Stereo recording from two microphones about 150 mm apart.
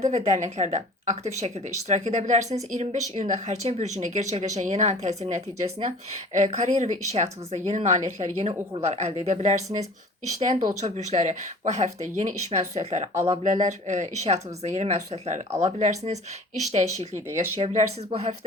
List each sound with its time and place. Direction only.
0.0 s a woman's voice: 50° right (ahead or behind)